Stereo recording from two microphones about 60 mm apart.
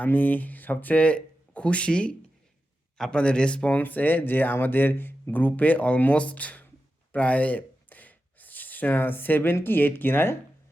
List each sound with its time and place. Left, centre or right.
0.0 s speech: left
7.1 s a sound: left
9.6 s speech: left